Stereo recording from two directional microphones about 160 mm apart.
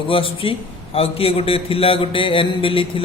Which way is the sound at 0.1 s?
35° left (ahead or behind).